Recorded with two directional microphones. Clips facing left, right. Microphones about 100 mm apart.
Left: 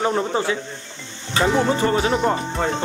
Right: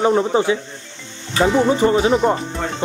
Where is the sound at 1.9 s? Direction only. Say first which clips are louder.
Right 4 dB; 5° right (ahead or behind).